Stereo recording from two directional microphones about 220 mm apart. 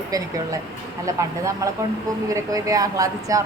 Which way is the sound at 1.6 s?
15° right (ahead or behind).